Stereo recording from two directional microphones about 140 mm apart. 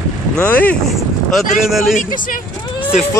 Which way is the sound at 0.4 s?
10° left (ahead or behind).